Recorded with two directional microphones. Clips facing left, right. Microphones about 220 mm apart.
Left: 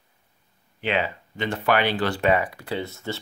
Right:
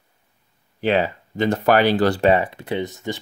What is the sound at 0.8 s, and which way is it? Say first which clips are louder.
Speech: right 6 dB; 40° right (ahead or behind).